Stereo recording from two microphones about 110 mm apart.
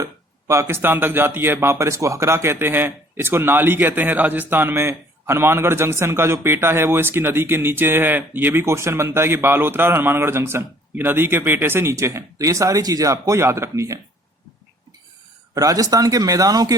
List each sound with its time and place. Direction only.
0.0 s speech: 25° right (ahead or behind)
15.5 s speech: 30° right (ahead or behind)